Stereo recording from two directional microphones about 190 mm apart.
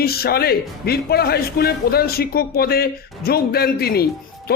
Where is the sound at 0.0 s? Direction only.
55° left (ahead or behind).